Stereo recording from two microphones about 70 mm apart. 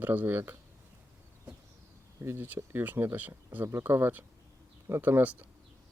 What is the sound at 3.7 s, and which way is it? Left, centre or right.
Speech, right.